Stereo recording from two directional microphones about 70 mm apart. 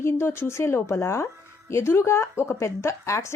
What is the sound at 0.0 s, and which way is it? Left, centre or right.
Speech, left.